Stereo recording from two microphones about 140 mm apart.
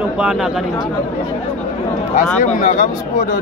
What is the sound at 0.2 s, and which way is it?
Speech, 5° right (ahead or behind).